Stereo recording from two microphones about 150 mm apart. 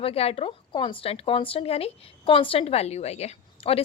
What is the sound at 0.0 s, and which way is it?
Speech, 40° left (ahead or behind).